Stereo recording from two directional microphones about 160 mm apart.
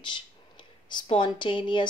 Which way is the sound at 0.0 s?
30° left (ahead or behind).